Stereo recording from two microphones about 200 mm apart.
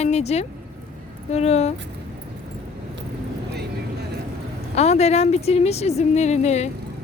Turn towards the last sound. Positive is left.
turn(degrees=35)  # may be behind; listen again after turning